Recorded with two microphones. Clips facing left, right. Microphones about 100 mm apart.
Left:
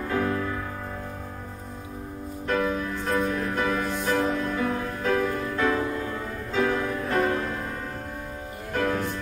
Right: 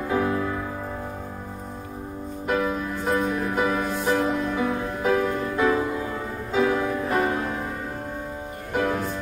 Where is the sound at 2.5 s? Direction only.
10° right (ahead or behind).